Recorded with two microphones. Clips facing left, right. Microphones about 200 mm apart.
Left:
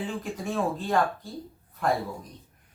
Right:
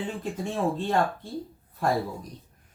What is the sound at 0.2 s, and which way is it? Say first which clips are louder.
Speech: right 1 dB; 25° right (ahead or behind).